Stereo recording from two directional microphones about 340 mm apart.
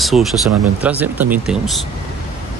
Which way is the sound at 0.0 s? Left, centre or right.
Centre.